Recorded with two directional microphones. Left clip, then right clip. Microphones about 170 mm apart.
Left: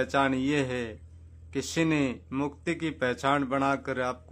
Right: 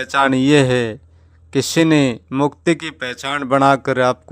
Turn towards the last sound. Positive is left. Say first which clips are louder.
# right 14 dB
turn(degrees=-40)  # may be behind; listen again after turning